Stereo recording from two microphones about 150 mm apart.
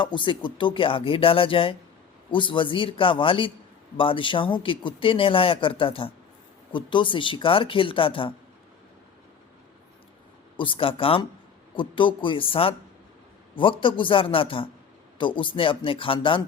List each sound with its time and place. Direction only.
0.0 s a man's voice: 35° left (ahead or behind)
10.6 s a man's voice: 35° left (ahead or behind)